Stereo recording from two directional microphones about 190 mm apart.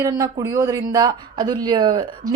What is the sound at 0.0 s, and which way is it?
A woman's voice, 15° right (ahead or behind).